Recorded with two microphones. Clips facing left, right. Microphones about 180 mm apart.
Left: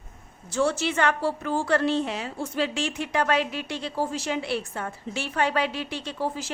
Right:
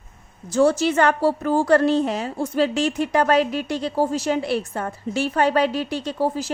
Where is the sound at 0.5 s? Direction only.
40° right (ahead or behind).